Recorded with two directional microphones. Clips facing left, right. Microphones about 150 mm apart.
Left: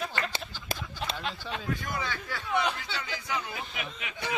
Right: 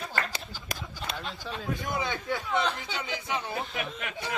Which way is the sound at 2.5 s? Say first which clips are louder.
Left 1 dB; 10° left (ahead or behind).